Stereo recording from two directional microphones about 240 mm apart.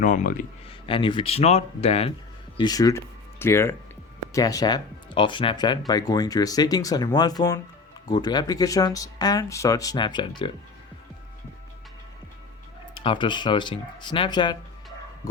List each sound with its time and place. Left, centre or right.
0.0 s speech: left
0.9 s speech: left
12.9 s speech: left